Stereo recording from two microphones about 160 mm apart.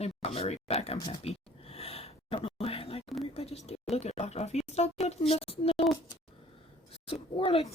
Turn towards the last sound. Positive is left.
turn(degrees=35)  # may be behind; listen again after turning